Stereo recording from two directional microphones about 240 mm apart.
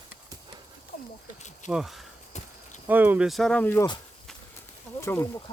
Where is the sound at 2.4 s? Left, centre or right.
Left.